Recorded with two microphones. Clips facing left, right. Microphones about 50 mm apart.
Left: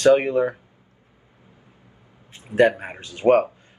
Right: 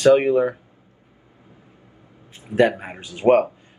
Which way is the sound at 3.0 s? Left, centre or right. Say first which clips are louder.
Right 1 dB; centre.